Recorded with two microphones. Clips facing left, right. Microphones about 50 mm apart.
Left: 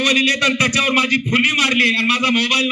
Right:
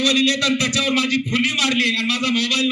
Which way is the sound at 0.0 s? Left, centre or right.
Left.